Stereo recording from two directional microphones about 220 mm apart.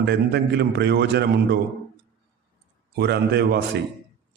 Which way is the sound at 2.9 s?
50° right (ahead or behind).